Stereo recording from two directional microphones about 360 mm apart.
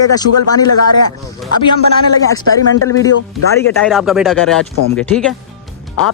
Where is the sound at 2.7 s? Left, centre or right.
Left.